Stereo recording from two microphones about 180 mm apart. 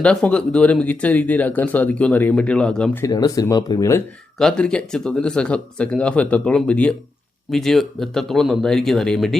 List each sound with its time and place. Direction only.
0.0 s speech: 5° left (ahead or behind)
3.0 s speech: 20° left (ahead or behind)
4.4 s speech: 5° left (ahead or behind)